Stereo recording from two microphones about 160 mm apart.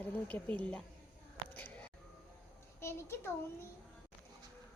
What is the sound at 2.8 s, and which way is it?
Speech, 15° left (ahead or behind).